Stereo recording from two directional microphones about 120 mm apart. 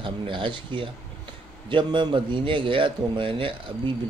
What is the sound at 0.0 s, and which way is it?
Speech, 45° right (ahead or behind).